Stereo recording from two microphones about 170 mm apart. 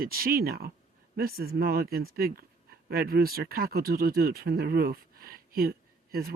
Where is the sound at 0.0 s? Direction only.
60° right (ahead or behind).